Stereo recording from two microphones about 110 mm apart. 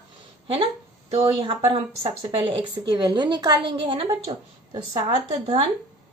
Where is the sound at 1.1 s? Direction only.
60° right (ahead or behind); by 3.7 s 40° right (ahead or behind).